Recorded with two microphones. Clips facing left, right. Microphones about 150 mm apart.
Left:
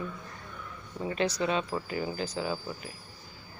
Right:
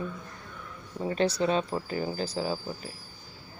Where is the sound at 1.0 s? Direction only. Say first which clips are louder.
Right 3 dB; 35° right (ahead or behind).